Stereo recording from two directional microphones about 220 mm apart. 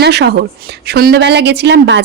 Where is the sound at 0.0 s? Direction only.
50° right (ahead or behind).